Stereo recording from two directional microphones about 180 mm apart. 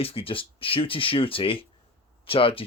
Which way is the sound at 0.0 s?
30° left (ahead or behind).